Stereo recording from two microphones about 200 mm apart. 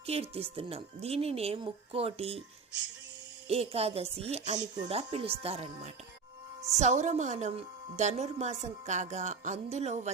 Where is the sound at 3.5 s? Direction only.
30° right (ahead or behind).